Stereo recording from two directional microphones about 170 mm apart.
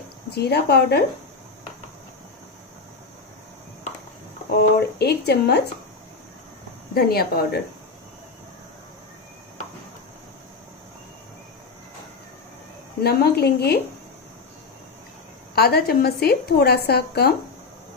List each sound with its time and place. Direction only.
0.3 s a woman's voice: 75° left (ahead or behind)
4.5 s a woman's voice: 70° left (ahead or behind)
6.9 s speech: 65° left (ahead or behind)
13.0 s a woman's voice: 70° left (ahead or behind)
15.5 s a woman's voice: 65° left (ahead or behind)